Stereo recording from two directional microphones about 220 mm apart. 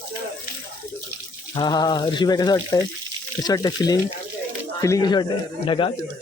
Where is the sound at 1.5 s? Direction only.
20° left (ahead or behind).